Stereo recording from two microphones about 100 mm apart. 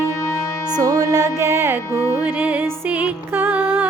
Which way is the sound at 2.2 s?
15° right (ahead or behind).